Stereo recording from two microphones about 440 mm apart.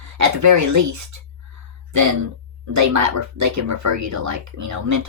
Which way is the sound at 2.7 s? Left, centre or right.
Right.